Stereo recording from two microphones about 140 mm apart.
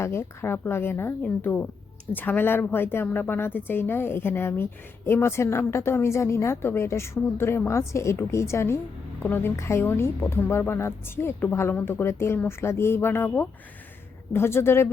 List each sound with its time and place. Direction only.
0.0 s a woman's voice: 20° left (ahead or behind)